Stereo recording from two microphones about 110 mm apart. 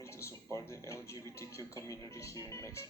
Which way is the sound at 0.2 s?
25° left (ahead or behind).